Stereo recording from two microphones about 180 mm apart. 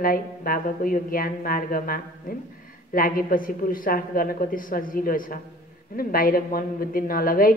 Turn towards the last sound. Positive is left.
turn(degrees=50)  # may be behind; listen again after turning